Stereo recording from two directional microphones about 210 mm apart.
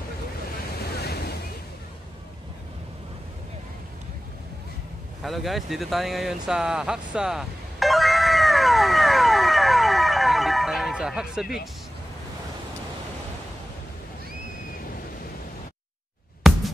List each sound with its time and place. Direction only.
0.7 s waves: 50° left (ahead or behind)
5.2 s vehicle: centre (ahead or behind)
16.5 s music: centre (ahead or behind)